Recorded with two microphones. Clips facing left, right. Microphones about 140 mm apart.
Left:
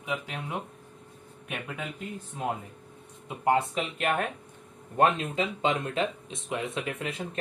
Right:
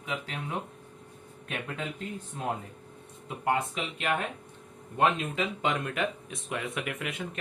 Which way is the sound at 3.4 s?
30° left (ahead or behind).